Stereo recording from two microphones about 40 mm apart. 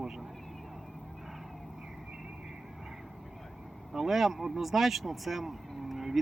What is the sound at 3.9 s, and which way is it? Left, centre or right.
Speech, centre.